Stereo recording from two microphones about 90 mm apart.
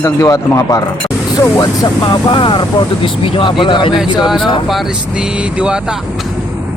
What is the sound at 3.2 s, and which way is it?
Speech, 90° left.